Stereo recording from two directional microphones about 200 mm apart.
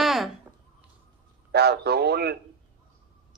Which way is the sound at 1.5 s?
55° right (ahead or behind).